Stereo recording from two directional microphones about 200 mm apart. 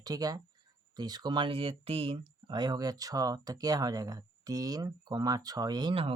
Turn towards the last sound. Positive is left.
turn(degrees=-25)  # may be behind; listen again after turning